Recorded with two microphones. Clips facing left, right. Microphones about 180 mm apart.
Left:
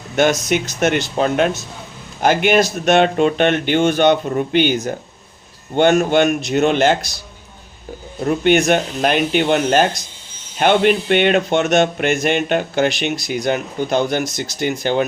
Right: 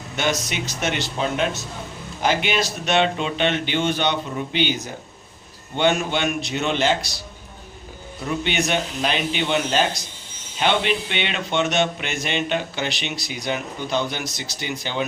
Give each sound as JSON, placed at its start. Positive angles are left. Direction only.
{"t": 0.2, "sound": "speech", "side_deg": 50}
{"t": 8.2, "sound": "speech", "side_deg": 50}